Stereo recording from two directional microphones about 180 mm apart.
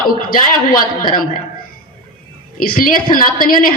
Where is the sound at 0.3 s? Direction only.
55° left (ahead or behind).